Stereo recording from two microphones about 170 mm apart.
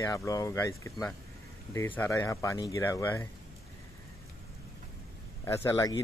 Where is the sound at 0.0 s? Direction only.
20° left (ahead or behind).